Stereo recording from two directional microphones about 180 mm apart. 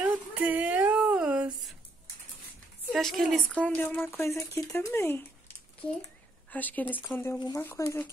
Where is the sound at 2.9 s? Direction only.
Centre (ahead or behind).